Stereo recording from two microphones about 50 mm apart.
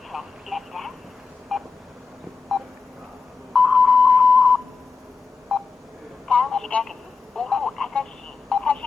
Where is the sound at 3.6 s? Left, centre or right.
Centre.